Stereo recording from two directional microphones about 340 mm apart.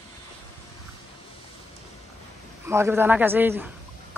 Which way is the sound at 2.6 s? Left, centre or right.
Centre.